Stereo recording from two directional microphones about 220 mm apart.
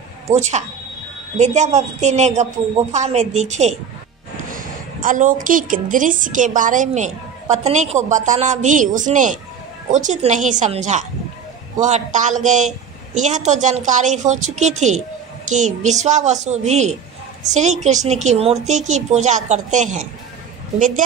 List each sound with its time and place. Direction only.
0.3 s a woman's voice: 30° right (ahead or behind)